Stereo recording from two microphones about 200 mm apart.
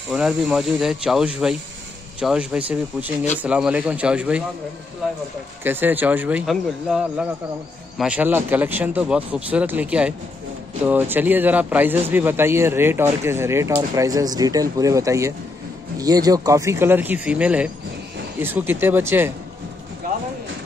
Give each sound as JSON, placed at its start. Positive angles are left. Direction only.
{"t": 0.1, "sound": "a man's voice", "side_deg": 0}
{"t": 5.6, "sound": "a man's voice", "side_deg": -10}